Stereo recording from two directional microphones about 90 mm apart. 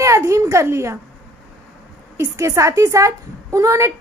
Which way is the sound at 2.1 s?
35° right (ahead or behind).